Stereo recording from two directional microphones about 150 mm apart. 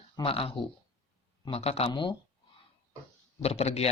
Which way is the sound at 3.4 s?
45° left (ahead or behind).